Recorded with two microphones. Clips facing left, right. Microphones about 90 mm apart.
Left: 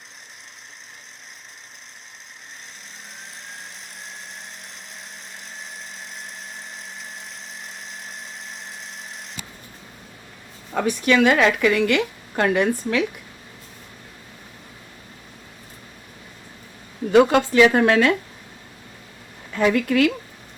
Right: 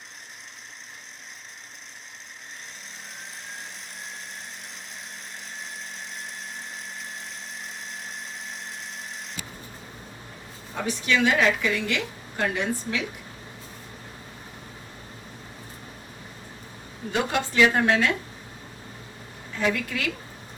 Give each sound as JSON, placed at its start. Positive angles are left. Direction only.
{"t": 5.5, "sound": "tools", "side_deg": 0}
{"t": 6.7, "sound": "a sound", "side_deg": 0}
{"t": 10.8, "sound": "a woman's voice", "side_deg": 60}
{"t": 17.1, "sound": "a woman's voice", "side_deg": 65}
{"t": 19.5, "sound": "a woman's voice", "side_deg": 60}